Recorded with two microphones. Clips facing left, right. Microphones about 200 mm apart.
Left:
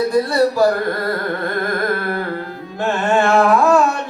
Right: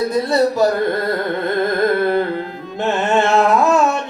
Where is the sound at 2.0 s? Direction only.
20° right (ahead or behind).